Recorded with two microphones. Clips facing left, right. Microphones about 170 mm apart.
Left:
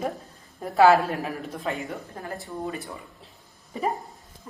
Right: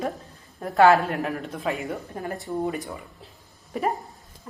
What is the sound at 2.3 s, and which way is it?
Speech, 20° right (ahead or behind).